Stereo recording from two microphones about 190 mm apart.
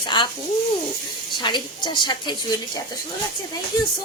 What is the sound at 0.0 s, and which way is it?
Speech, 25° left (ahead or behind).